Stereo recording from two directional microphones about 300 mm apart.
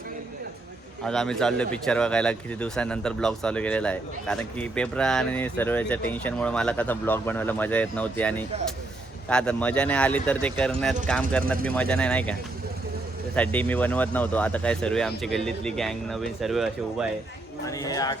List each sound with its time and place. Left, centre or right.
1.0 s speech: centre
17.7 s speech: centre